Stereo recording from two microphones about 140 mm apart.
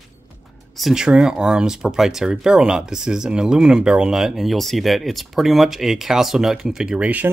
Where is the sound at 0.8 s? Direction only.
5° right (ahead or behind).